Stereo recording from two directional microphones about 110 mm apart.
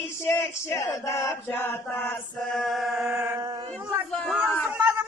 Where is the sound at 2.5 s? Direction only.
Centre (ahead or behind).